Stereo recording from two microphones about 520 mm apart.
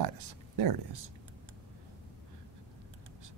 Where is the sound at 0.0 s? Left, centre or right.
Right.